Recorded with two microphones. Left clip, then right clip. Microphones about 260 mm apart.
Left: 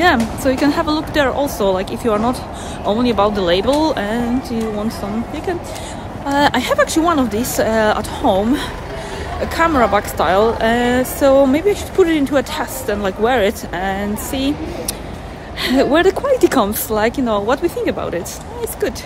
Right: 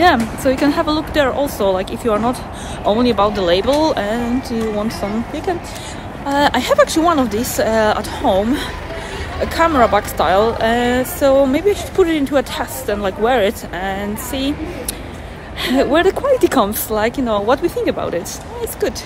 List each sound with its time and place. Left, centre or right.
0.0 s a woman's voice: centre
6.2 s a woman's voice: centre
15.6 s a woman's voice: centre